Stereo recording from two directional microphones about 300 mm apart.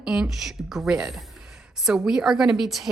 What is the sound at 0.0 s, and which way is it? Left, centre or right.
A woman's voice, centre.